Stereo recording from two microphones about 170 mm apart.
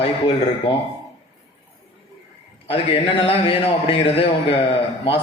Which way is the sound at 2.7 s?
35° left (ahead or behind).